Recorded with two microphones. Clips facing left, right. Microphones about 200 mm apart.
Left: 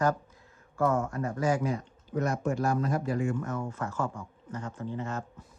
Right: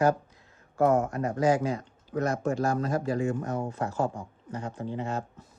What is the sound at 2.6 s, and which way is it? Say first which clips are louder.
Speech: right 1 dB; 45° right (ahead or behind).